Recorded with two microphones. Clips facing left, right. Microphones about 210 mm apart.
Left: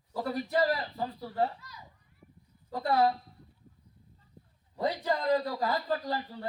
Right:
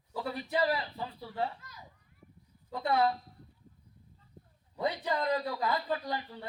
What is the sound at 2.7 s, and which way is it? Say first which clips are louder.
Speech: left 2 dB; 35° left (ahead or behind).